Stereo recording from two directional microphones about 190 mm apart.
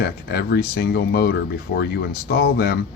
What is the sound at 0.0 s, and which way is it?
Speech, 55° left (ahead or behind).